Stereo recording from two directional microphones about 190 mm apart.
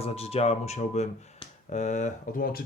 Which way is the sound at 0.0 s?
30° left (ahead or behind).